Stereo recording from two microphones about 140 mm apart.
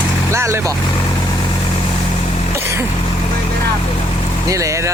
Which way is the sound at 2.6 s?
15° right (ahead or behind).